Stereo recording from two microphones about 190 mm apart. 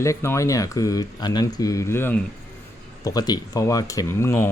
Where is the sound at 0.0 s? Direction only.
15° left (ahead or behind).